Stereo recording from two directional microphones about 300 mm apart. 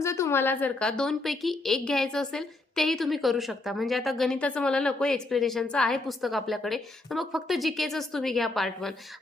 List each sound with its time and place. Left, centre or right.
0.0 s a woman's voice: centre